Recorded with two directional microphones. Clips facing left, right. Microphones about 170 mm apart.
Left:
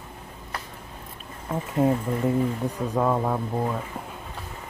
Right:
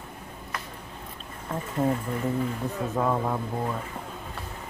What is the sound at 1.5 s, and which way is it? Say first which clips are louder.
Speech: left 3 dB; 5° left (ahead or behind).